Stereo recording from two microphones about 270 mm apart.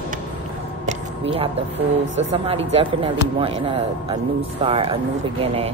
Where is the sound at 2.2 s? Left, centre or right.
Right.